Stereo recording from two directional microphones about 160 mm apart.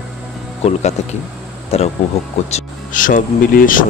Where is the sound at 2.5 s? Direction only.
55° left (ahead or behind).